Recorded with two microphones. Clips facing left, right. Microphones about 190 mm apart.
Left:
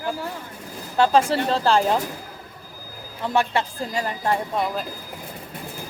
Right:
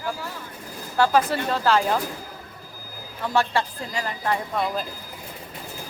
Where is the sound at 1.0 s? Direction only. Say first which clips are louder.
Left 2 dB; 25° left (ahead or behind).